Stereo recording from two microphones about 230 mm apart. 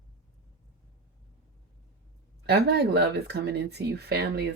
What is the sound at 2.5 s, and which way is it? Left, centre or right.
Speech, right.